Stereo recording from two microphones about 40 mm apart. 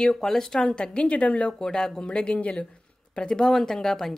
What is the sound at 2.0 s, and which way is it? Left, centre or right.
A woman's voice, left.